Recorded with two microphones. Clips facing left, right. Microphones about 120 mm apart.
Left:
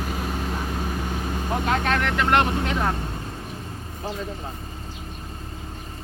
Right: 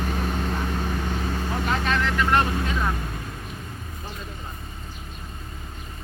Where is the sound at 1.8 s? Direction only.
60° left (ahead or behind).